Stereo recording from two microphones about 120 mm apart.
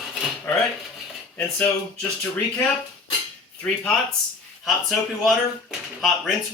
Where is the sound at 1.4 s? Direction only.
15° left (ahead or behind).